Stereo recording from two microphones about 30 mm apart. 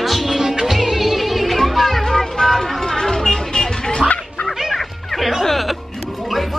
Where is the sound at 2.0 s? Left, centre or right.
Centre.